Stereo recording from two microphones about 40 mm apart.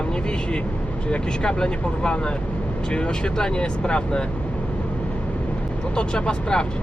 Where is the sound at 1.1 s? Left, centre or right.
Left.